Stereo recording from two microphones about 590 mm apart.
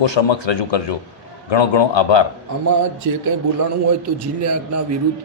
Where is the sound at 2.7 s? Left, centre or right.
Right.